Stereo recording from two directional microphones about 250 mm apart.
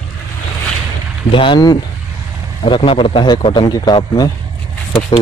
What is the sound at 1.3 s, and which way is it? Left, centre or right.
A man's voice, centre.